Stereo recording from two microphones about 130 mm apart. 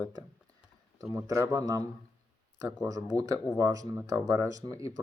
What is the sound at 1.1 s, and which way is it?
Speech, 20° right (ahead or behind).